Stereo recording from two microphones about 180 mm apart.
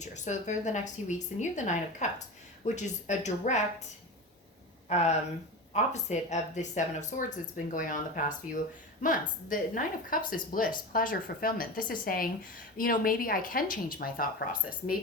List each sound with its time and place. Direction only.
0.0 s a woman's voice: 40° left (ahead or behind)
4.9 s a woman's voice: 40° left (ahead or behind); by 14.9 s 55° left (ahead or behind)